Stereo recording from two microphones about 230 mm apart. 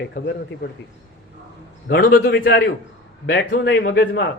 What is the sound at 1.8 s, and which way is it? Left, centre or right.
A man's voice, left.